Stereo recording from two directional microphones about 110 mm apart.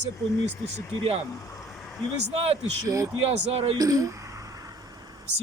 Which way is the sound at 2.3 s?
65° right (ahead or behind).